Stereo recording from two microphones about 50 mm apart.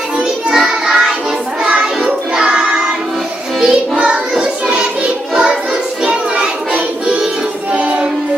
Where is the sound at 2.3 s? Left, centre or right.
Centre.